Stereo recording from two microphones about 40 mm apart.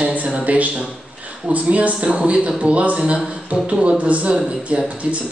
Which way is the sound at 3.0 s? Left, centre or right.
Right.